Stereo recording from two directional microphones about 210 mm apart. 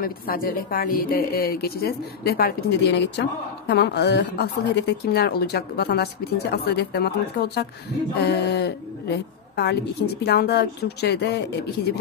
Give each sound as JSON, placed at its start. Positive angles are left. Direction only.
{"t": 0.0, "sound": "a woman's voice", "side_deg": 45}